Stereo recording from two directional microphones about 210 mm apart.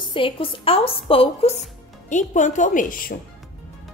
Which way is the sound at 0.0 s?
25° left (ahead or behind).